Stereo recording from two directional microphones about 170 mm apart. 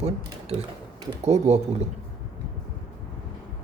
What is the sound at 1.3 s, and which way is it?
Speech, 40° right (ahead or behind).